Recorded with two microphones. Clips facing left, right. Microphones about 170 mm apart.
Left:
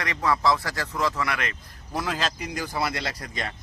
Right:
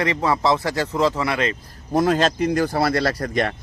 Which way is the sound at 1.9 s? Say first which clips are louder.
Right 11 dB; 45° right (ahead or behind).